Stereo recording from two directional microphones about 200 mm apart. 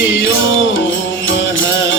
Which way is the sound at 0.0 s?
75° left (ahead or behind).